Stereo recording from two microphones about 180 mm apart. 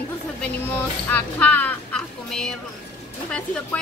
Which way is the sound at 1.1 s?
10° left (ahead or behind).